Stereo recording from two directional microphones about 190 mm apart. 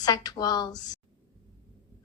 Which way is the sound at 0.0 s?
20° left (ahead or behind).